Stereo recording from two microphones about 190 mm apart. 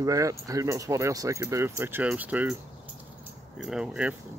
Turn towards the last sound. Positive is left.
turn(degrees=-5)  # may be behind; listen again after turning